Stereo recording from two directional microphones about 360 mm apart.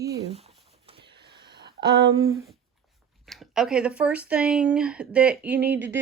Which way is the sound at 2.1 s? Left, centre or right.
Centre.